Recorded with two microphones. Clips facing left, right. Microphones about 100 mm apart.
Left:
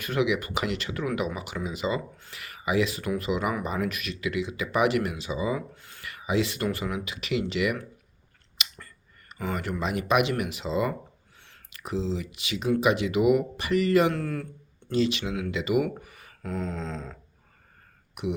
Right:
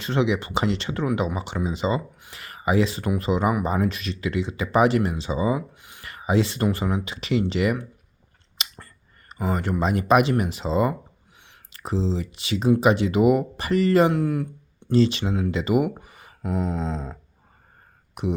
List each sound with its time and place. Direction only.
0.0 s speech: 30° right (ahead or behind)
5.5 s a sound: 15° right (ahead or behind)
6.1 s speech: 35° right (ahead or behind)
8.5 s a sound: 35° right (ahead or behind)
9.3 s speech: 35° right (ahead or behind)
14.1 s speech: 15° right (ahead or behind)
14.9 s speech: 35° right (ahead or behind)
16.4 s speech: 15° right (ahead or behind); by 18.3 s 35° right (ahead or behind)